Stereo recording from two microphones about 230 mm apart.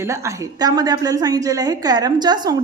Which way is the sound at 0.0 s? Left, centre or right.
Centre.